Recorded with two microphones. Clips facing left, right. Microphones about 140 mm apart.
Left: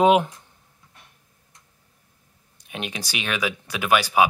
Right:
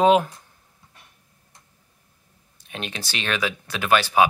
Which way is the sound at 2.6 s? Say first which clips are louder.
Left 1 dB; 10° left (ahead or behind).